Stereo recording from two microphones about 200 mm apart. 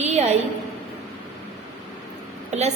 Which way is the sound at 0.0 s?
35° right (ahead or behind).